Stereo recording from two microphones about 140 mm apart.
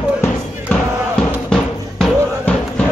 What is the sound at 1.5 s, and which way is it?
Music, 5° left (ahead or behind).